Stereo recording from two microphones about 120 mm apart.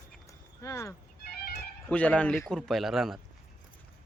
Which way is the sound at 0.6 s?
25° left (ahead or behind).